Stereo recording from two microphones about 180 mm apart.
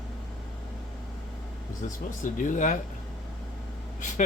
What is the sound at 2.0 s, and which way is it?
Speech, 45° left (ahead or behind).